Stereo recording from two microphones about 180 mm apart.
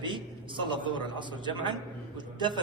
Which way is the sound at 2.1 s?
25° right (ahead or behind).